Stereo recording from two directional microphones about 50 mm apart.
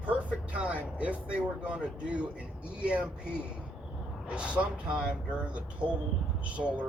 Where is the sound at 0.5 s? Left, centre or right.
Right.